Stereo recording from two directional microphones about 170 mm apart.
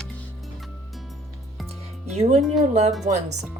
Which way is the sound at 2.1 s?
40° right (ahead or behind).